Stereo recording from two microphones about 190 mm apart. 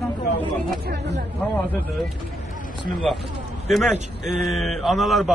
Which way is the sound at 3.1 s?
Centre (ahead or behind).